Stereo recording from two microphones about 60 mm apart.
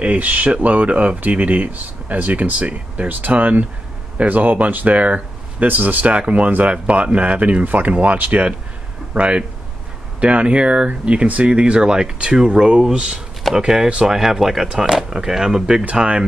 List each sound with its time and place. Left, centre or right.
0.0 s speech: right